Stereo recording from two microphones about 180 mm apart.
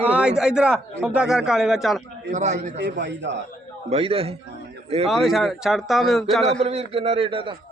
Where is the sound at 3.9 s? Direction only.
35° right (ahead or behind).